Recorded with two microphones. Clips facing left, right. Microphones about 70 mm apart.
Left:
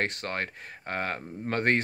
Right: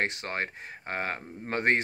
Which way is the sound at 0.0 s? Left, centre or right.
Right.